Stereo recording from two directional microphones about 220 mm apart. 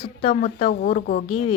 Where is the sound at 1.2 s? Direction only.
25° left (ahead or behind).